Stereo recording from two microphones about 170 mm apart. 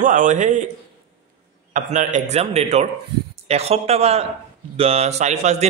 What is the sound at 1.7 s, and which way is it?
A man's voice, 45° right (ahead or behind).